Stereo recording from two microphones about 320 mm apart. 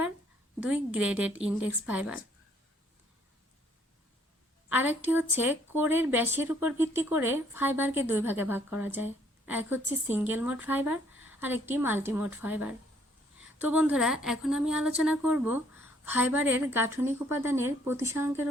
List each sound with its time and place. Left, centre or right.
0.6 s speech: centre
4.7 s speech: centre